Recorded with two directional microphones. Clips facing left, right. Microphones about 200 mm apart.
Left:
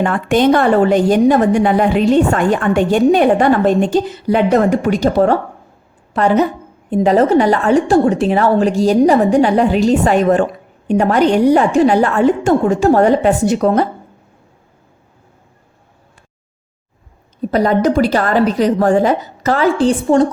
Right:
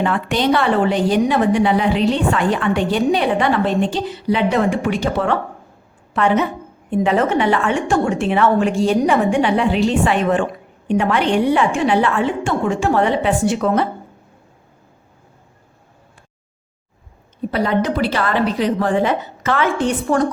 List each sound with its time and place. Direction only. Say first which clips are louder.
0.0 s a woman's voice: left 5 dB; 50° left (ahead or behind)
17.5 s a woman's voice: left 6 dB; 40° left (ahead or behind)